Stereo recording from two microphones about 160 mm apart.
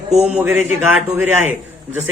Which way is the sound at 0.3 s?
5° right (ahead or behind).